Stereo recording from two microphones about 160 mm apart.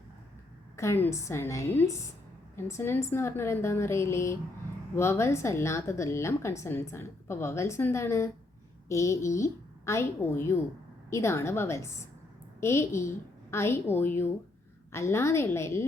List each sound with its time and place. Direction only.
0.8 s a woman's voice: 15° left (ahead or behind)